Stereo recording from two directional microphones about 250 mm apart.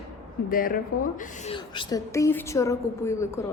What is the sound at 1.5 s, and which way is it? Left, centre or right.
A woman's voice, centre.